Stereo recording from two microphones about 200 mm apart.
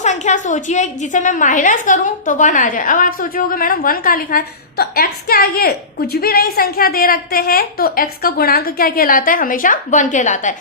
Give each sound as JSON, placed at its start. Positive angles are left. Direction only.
{"t": 0.0, "sound": "a woman's voice", "side_deg": 35}